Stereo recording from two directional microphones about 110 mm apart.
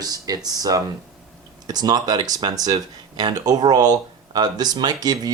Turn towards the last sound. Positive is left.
turn(degrees=-40)  # may be behind; listen again after turning